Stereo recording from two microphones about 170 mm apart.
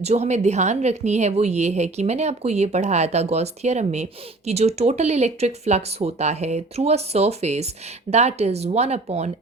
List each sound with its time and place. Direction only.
0.0 s a woman's voice: 40° right (ahead or behind)